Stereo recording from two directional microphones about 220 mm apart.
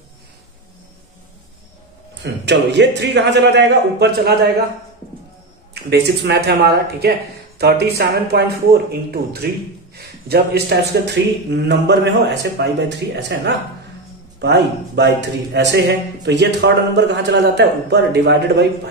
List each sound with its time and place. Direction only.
2.4 s a man's voice: 50° right (ahead or behind)
5.9 s a man's voice: 50° right (ahead or behind)